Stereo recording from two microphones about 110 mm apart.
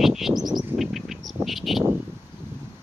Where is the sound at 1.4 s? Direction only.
Centre (ahead or behind).